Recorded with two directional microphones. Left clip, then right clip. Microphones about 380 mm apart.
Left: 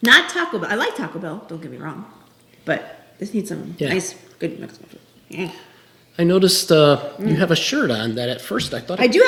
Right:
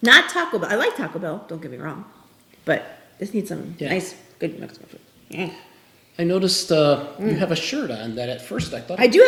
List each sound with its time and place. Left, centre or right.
0.1 s a woman's voice: centre
6.1 s a man's voice: left
9.0 s speech: centre